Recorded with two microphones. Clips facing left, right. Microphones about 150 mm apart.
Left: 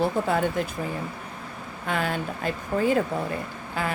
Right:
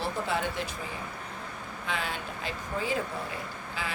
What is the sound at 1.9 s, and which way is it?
A woman's voice, 50° left (ahead or behind).